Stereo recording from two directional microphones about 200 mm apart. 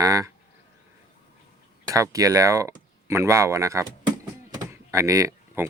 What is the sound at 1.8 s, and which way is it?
Speech, 15° right (ahead or behind).